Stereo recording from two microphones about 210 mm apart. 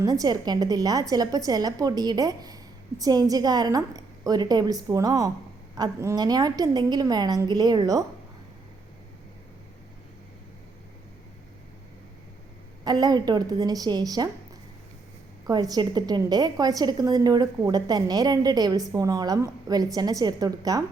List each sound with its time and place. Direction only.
0.0 s a woman's voice: 15° right (ahead or behind)
12.8 s a woman's voice: 20° right (ahead or behind)
15.4 s a woman's voice: 20° right (ahead or behind)